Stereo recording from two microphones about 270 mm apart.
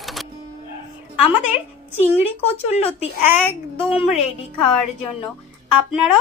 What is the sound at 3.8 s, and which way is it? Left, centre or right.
Speech, centre.